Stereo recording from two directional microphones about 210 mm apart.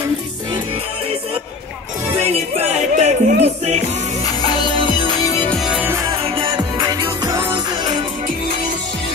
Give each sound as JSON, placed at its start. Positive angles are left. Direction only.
{"t": 2.1, "sound": "music", "side_deg": -30}
{"t": 4.8, "sound": "music", "side_deg": 20}
{"t": 5.4, "sound": "music", "side_deg": 5}
{"t": 6.3, "sound": "music", "side_deg": -20}